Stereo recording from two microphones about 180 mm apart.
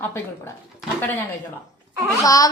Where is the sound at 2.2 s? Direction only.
20° left (ahead or behind).